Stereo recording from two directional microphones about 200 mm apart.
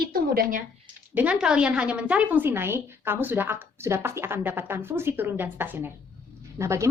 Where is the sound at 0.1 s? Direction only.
45° right (ahead or behind).